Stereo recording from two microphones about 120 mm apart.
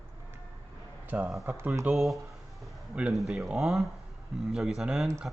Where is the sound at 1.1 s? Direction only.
15° right (ahead or behind).